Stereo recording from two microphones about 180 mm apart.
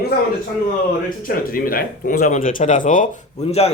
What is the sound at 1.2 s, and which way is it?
Speech, 50° left (ahead or behind).